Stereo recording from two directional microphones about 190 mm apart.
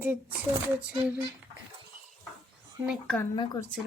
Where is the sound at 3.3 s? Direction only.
20° left (ahead or behind).